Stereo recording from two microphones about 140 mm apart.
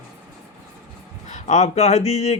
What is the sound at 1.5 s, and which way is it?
Speech, 55° left (ahead or behind).